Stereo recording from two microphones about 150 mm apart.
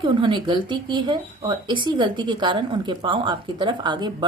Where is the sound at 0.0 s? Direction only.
30° right (ahead or behind).